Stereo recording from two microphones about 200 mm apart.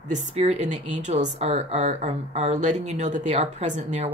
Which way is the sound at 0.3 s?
35° right (ahead or behind).